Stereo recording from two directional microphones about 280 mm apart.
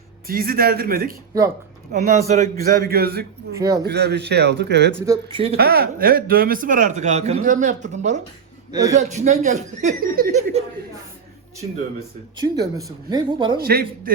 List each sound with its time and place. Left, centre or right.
0.3 s a man's voice: right
3.5 s speech: centre
3.8 s a man's voice: right
4.9 s speech: centre
5.5 s speech: right
8.7 s speech: centre
9.0 s speech: right
12.4 s speech: centre
13.6 s a man's voice: right